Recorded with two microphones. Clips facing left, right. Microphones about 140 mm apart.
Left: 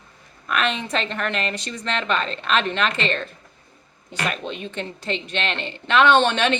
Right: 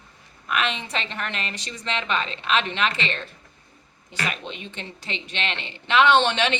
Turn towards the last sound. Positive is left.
turn(degrees=50)  # may be behind; listen again after turning